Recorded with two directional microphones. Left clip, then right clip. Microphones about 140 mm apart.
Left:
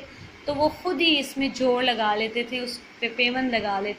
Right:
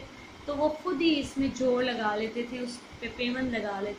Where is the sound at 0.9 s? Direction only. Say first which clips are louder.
Left 5 dB; 30° left (ahead or behind).